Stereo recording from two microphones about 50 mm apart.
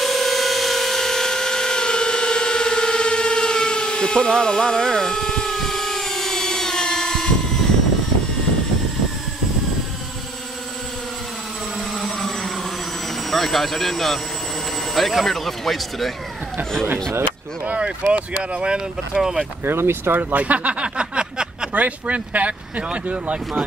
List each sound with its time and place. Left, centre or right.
0.0 s tools: centre
11.9 s vehicle: centre
13.3 s speech: centre
17.6 s speech: right
19.6 s speech: right
20.2 s a sound: right
21.7 s speech: right